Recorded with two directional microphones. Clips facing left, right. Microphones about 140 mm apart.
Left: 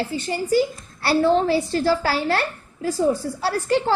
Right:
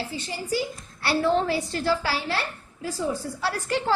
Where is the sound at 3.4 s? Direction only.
30° left (ahead or behind).